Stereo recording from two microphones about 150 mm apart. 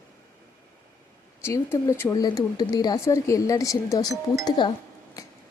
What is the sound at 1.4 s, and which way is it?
A woman's voice, 15° left (ahead or behind).